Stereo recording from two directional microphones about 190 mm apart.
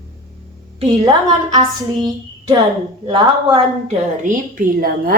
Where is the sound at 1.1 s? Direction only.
25° right (ahead or behind).